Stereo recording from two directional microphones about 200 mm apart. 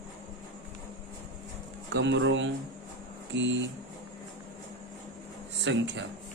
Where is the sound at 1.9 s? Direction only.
60° right (ahead or behind).